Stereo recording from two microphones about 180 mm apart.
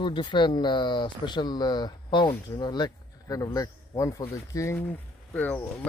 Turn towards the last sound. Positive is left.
turn(degrees=10)  # may be behind; listen again after turning